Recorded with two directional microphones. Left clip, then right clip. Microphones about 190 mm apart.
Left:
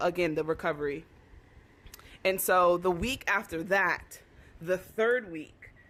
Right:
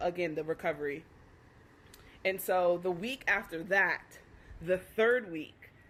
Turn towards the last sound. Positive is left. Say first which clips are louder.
# left 1 dB
turn(degrees=-5)  # may be behind; listen again after turning